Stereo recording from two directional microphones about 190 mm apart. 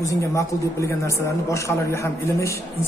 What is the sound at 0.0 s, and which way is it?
A man's voice, 15° left (ahead or behind).